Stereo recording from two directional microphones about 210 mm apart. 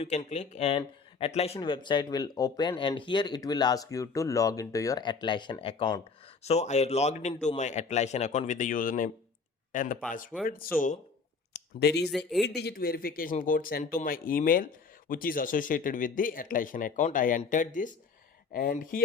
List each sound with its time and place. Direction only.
0.0 s a man's voice: 30° left (ahead or behind)